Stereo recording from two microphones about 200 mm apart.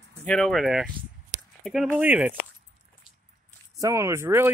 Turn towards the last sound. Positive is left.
turn(degrees=-10)  # may be behind; listen again after turning